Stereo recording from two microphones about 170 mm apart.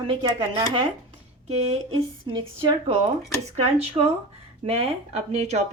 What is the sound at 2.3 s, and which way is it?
A woman's voice, 25° right (ahead or behind).